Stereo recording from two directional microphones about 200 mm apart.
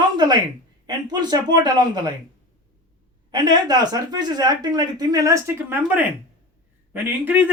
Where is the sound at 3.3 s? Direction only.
20° right (ahead or behind).